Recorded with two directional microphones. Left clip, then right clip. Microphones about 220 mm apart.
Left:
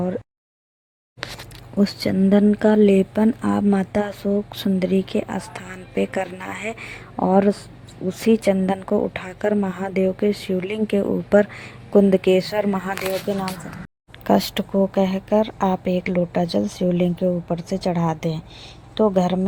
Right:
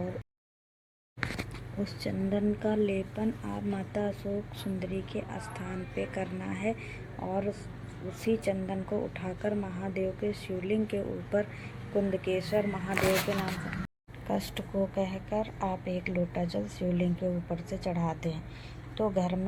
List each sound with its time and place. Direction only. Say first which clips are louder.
1.8 s speech: left 14 dB; 55° left (ahead or behind)
14.3 s speech: left 15 dB; 50° left (ahead or behind)